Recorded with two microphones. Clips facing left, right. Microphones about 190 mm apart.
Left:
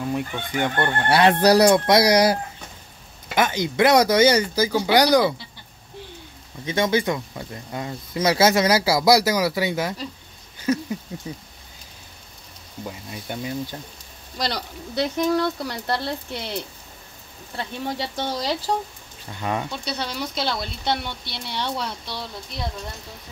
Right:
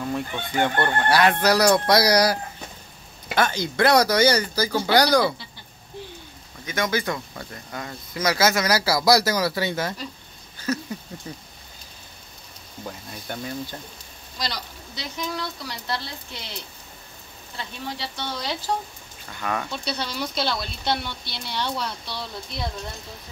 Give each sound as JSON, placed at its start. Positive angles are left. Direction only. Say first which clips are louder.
{"t": 0.0, "sound": "speech", "louder": "left 1 dB", "side_deg": 15}
{"t": 1.0, "sound": "speech", "louder": "left 4 dB", "side_deg": 25}
{"t": 1.7, "sound": "speech", "louder": "left 2 dB", "side_deg": 20}
{"t": 3.3, "sound": "speech", "louder": "left 2 dB", "side_deg": 15}
{"t": 6.6, "sound": "speech", "louder": "left 4 dB", "side_deg": 25}
{"t": 10.6, "sound": "a sound", "louder": "left 4 dB", "side_deg": 20}
{"t": 12.8, "sound": "speech", "louder": "left 2 dB", "side_deg": 10}
{"t": 14.4, "sound": "speech", "louder": "left 5 dB", "side_deg": 60}
{"t": 17.6, "sound": "speech", "louder": "left 5 dB", "side_deg": 50}
{"t": 19.4, "sound": "speech", "louder": "left 1 dB", "side_deg": 25}